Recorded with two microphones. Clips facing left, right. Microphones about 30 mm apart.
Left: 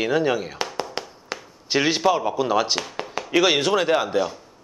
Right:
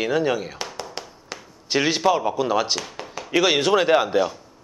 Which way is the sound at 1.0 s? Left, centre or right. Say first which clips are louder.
Left 4 dB; centre.